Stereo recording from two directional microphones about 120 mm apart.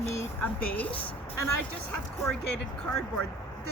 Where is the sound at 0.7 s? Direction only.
15° left (ahead or behind).